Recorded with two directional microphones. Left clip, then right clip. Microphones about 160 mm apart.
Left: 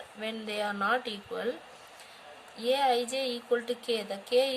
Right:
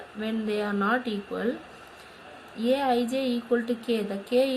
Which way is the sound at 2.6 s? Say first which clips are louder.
Right 2 dB; 45° left (ahead or behind).